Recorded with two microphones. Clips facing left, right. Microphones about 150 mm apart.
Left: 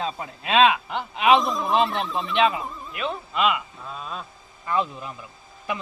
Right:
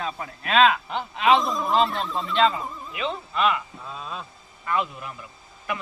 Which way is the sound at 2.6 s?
Centre (ahead or behind).